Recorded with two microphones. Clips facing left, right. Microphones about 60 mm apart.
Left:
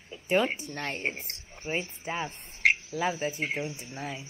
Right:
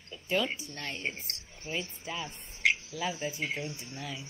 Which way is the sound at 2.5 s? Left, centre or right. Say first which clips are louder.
Left 3 dB; left.